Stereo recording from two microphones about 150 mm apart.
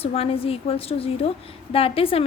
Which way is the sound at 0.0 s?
40° left (ahead or behind).